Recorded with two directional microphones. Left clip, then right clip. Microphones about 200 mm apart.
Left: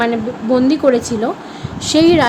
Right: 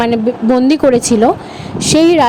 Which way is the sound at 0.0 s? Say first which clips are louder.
Right 4 dB; 40° right (ahead or behind).